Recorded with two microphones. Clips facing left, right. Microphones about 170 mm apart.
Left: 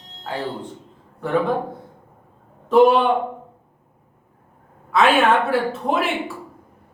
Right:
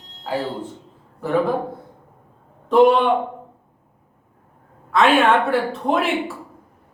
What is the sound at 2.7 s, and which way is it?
Speech, centre (ahead or behind).